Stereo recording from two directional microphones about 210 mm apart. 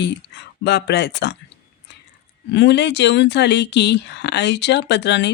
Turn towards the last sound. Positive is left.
turn(degrees=55)  # may be behind; listen again after turning